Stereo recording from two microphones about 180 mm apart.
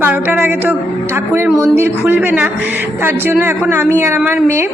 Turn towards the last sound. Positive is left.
turn(degrees=-15)  # may be behind; listen again after turning